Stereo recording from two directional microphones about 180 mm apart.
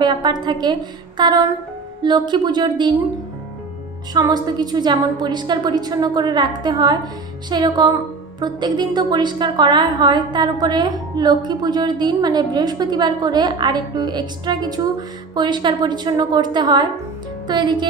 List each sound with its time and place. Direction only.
0.0 s a woman's voice: 25° right (ahead or behind)
4.1 s a woman's voice: 20° right (ahead or behind)